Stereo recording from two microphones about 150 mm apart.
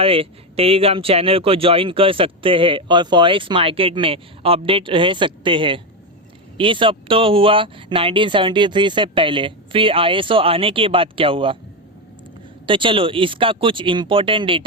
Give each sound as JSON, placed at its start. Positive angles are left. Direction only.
{"t": 0.0, "sound": "speech", "side_deg": -40}
{"t": 12.6, "sound": "speech", "side_deg": -35}